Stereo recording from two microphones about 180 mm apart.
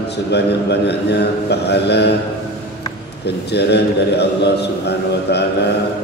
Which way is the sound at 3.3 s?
65° left (ahead or behind).